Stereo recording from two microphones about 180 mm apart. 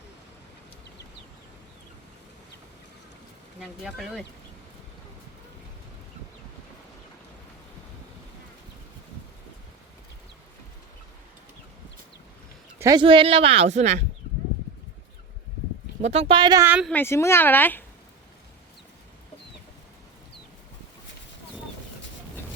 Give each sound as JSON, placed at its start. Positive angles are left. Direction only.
{"t": 3.6, "sound": "speech", "side_deg": 0}
{"t": 12.8, "sound": "speech", "side_deg": -25}
{"t": 16.0, "sound": "speech", "side_deg": -35}
{"t": 16.6, "sound": "speech", "side_deg": -10}
{"t": 16.9, "sound": "speech", "side_deg": 15}